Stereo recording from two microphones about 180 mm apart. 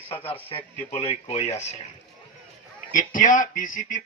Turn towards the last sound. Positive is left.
turn(degrees=45)  # may be behind; listen again after turning